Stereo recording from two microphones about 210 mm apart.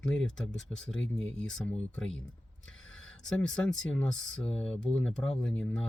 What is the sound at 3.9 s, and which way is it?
Speech, 5° left (ahead or behind).